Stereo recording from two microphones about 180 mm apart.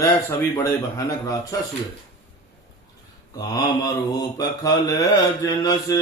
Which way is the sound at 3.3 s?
20° left (ahead or behind).